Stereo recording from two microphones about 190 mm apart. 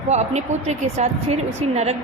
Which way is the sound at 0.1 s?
35° right (ahead or behind).